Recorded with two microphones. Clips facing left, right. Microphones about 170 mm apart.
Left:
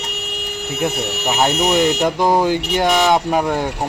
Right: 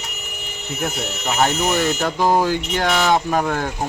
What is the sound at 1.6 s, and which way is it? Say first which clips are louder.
A man's voice: left 4 dB; 20° left (ahead or behind).